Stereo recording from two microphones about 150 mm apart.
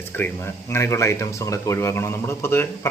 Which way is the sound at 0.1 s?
15° left (ahead or behind).